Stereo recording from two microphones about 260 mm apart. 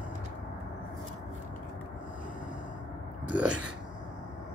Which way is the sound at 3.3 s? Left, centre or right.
Centre.